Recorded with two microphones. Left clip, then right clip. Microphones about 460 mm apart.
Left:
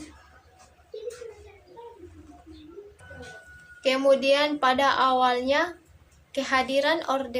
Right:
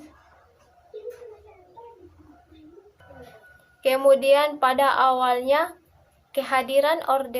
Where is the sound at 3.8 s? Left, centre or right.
Right.